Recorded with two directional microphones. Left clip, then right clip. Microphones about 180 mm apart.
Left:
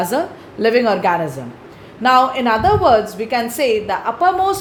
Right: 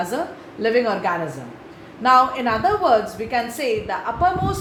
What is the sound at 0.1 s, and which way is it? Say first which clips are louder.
A woman's voice: left 6 dB; 60° left (ahead or behind).